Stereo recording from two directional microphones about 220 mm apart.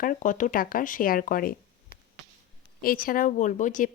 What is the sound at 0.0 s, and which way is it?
A woman's voice, 35° left (ahead or behind).